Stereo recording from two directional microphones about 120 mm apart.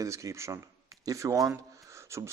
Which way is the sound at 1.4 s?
25° right (ahead or behind).